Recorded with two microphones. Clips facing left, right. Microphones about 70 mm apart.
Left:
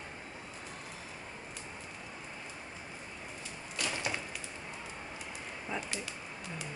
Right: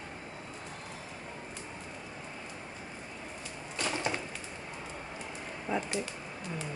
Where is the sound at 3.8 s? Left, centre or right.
Right.